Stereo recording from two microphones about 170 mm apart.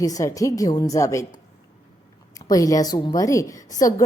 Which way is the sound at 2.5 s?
20° left (ahead or behind).